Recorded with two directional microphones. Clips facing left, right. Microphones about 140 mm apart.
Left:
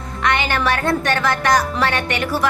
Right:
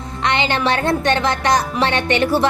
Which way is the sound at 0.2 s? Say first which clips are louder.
Right 1 dB; 25° right (ahead or behind).